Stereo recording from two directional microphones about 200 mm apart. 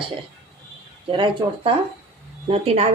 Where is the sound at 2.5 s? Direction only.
30° right (ahead or behind).